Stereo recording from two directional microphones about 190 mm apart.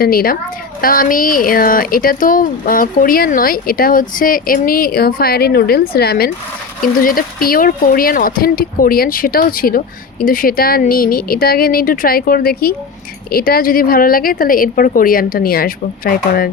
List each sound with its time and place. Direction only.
0.0 s speech: 50° left (ahead or behind)